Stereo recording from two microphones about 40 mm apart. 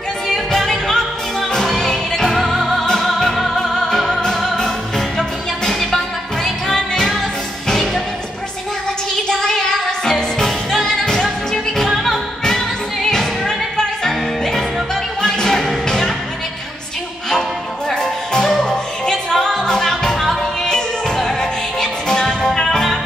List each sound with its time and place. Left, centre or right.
0.3 s music: centre
2.3 s music: centre
9.3 s music: centre
12.4 s music: centre
17.3 s music: centre
21.4 s music: centre